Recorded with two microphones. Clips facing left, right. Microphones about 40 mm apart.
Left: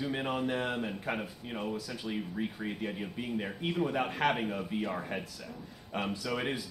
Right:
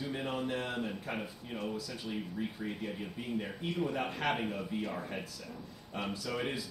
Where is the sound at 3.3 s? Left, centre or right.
Left.